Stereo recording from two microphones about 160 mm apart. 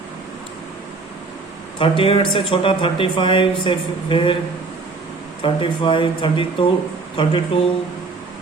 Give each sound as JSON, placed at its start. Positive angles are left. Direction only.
{"t": 1.8, "sound": "speech", "side_deg": 35}
{"t": 5.4, "sound": "speech", "side_deg": 35}